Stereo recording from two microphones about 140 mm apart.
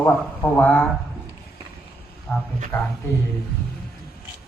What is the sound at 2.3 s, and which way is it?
Speech, 15° left (ahead or behind).